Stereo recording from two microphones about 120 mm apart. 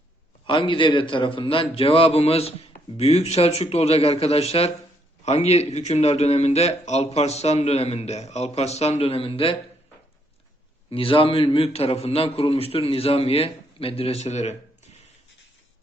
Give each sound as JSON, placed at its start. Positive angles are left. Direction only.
{"t": 0.4, "sound": "a man's voice", "side_deg": 45}
{"t": 10.8, "sound": "a man's voice", "side_deg": 50}